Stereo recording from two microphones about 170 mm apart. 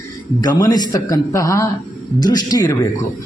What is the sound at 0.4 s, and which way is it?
A man's voice, 20° left (ahead or behind).